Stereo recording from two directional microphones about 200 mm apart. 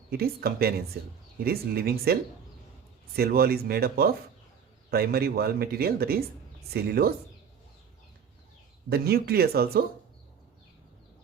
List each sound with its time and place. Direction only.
0.1 s speech: 50° right (ahead or behind)
3.2 s speech: 50° right (ahead or behind)
8.9 s speech: 50° right (ahead or behind)